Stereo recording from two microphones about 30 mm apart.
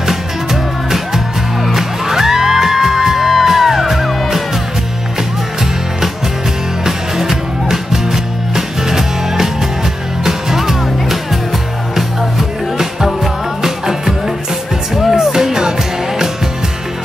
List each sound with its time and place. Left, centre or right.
0.0 s music: centre
6.8 s music: centre
15.1 s music: centre